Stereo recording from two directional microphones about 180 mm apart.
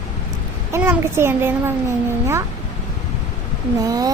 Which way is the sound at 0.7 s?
15° right (ahead or behind).